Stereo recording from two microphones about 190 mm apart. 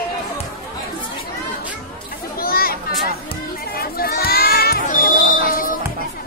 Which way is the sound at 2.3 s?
50° left (ahead or behind).